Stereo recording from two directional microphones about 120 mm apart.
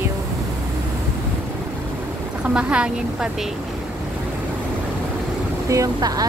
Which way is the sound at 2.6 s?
10° right (ahead or behind).